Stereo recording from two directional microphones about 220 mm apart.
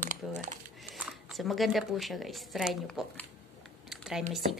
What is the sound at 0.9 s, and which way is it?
Speech, centre (ahead or behind).